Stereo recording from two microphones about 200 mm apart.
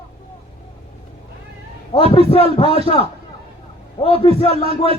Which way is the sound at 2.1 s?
30° left (ahead or behind).